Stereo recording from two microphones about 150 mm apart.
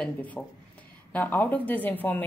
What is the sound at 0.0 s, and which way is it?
Speech, 10° left (ahead or behind).